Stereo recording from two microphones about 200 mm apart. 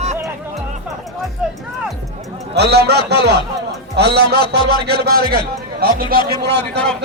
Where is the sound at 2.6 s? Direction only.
55° right (ahead or behind).